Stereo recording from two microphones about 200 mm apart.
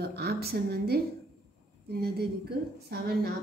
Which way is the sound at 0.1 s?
50° right (ahead or behind).